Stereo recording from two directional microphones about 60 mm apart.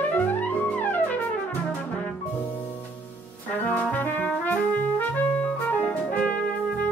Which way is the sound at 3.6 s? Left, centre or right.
Left.